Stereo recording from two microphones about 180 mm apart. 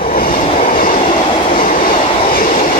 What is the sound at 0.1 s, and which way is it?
Train, 50° left (ahead or behind).